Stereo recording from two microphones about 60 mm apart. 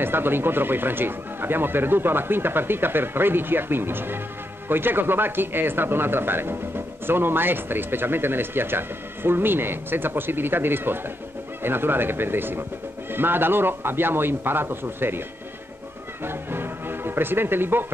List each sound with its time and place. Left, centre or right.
0.0 s speech: right